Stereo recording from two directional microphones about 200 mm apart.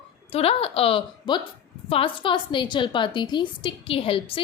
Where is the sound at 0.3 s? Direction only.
30° left (ahead or behind).